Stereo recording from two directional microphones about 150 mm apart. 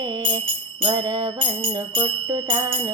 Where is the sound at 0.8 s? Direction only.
35° right (ahead or behind).